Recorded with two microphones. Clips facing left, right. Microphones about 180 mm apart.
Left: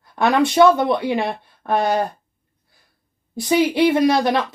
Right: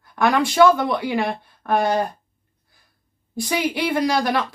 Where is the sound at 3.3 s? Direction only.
25° left (ahead or behind).